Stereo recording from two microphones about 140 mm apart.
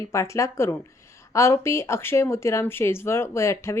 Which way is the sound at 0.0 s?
20° left (ahead or behind).